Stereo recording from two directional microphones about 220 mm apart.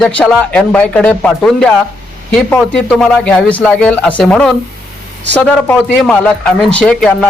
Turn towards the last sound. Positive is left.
turn(degrees=5)  # may be behind; listen again after turning